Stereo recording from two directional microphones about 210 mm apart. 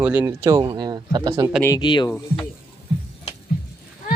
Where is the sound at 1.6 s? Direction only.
20° left (ahead or behind).